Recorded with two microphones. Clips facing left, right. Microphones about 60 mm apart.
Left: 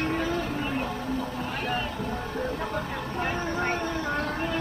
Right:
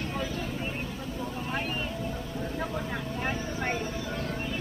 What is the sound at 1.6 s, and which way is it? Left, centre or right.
Vehicle, left.